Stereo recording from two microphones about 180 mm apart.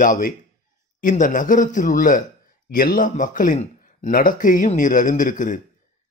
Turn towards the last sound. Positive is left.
turn(degrees=45)  # may be behind; listen again after turning